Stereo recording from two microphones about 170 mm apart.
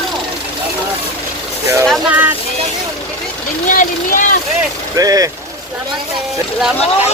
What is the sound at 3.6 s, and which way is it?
Speech, 50° left (ahead or behind).